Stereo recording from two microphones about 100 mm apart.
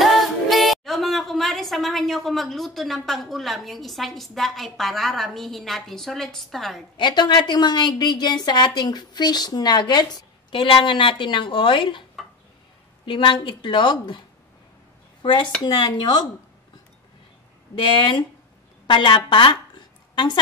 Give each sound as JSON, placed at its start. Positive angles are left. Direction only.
{"t": 0.0, "sound": "speech", "side_deg": 0}
{"t": 7.0, "sound": "a woman's voice", "side_deg": 50}
{"t": 13.0, "sound": "a woman's voice", "side_deg": 55}
{"t": 15.6, "sound": "a woman's voice", "side_deg": 45}
{"t": 17.7, "sound": "a woman's voice", "side_deg": 55}